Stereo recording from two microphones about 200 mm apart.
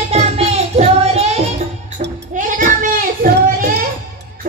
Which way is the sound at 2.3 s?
40° right (ahead or behind).